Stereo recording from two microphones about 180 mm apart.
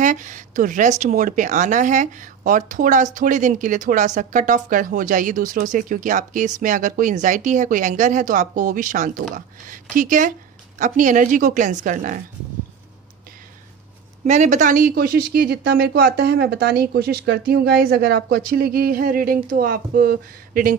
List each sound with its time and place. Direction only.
0.0 s speech: 45° right (ahead or behind)
14.2 s speech: 40° right (ahead or behind)